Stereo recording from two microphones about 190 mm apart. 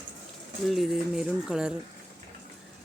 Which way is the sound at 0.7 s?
Centre (ahead or behind).